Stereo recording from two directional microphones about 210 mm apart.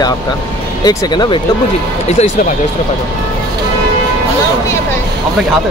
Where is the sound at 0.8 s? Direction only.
20° left (ahead or behind).